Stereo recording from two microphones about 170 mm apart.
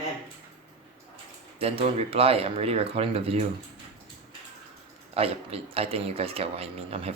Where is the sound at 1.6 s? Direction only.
35° right (ahead or behind).